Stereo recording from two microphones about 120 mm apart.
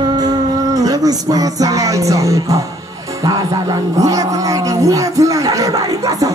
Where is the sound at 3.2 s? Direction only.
30° right (ahead or behind).